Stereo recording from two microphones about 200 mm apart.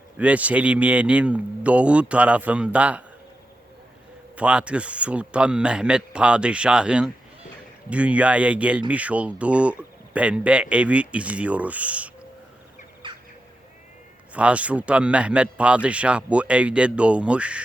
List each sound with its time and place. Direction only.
0.2 s speech: 5° right (ahead or behind)
4.4 s speech: 5° right (ahead or behind)
13.0 s bird: 25° right (ahead or behind)
14.3 s speech: 5° right (ahead or behind)